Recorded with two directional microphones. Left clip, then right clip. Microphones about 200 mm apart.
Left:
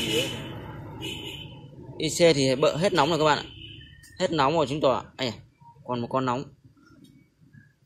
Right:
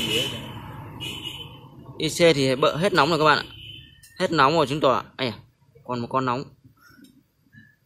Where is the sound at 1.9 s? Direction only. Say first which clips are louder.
Right 2 dB; 10° right (ahead or behind).